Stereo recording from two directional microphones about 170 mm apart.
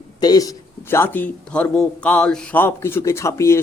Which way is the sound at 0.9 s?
10° left (ahead or behind).